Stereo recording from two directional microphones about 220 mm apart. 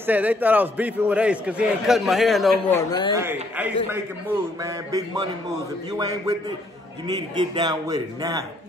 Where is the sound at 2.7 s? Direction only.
20° left (ahead or behind).